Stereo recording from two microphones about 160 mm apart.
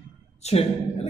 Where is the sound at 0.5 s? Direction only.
40° left (ahead or behind).